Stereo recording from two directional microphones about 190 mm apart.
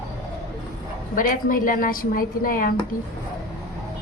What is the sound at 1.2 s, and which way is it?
A woman's voice, 45° left (ahead or behind).